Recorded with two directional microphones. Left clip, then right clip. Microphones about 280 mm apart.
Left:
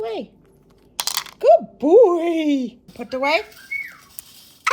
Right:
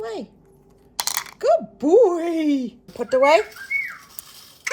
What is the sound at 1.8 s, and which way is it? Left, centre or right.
Speech, centre.